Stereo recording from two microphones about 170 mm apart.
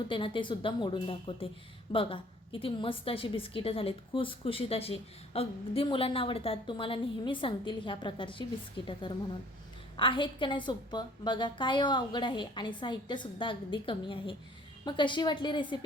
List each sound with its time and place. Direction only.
0.1 s a woman's voice: 30° left (ahead or behind)